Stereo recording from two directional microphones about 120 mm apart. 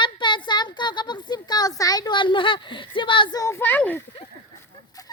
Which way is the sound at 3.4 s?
20° left (ahead or behind).